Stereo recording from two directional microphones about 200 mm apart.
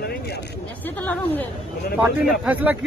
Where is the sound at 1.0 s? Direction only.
10° left (ahead or behind).